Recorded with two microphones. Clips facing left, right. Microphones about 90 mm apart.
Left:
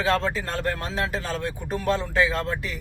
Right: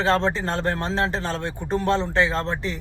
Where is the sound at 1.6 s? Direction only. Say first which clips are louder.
Right 4 dB; 5° left (ahead or behind).